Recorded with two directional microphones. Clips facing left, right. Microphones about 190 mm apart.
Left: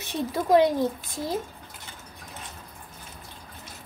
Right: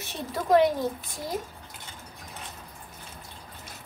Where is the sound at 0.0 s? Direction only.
20° left (ahead or behind).